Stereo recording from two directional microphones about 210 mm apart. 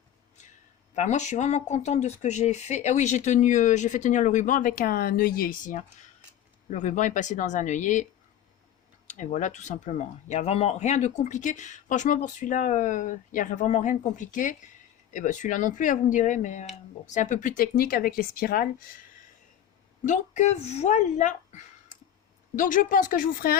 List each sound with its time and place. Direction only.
0.9 s speech: 35° left (ahead or behind)
9.0 s speech: 35° left (ahead or behind)
20.1 s speech: 35° left (ahead or behind)